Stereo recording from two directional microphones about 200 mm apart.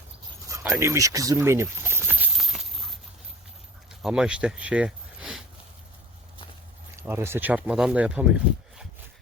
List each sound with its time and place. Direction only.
0.4 s dog: 15° right (ahead or behind)
0.8 s keys jangling: 15° right (ahead or behind)
4.0 s speech: 5° right (ahead or behind)
6.9 s speech: 10° right (ahead or behind)